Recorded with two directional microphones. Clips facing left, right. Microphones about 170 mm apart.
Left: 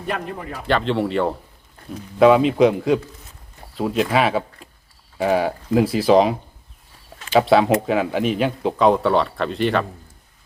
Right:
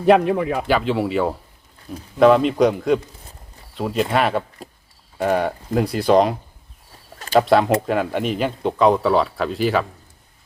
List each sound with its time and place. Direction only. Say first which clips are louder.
0.0 s speech: right 12 dB; 85° right
0.6 s speech: right 1 dB; 5° right (ahead or behind)
7.3 s speech: even; centre (ahead or behind)